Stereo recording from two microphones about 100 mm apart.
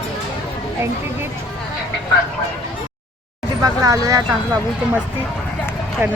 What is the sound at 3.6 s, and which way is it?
Speech, 35° right (ahead or behind).